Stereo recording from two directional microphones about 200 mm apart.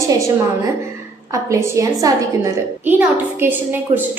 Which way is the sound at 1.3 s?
15° right (ahead or behind).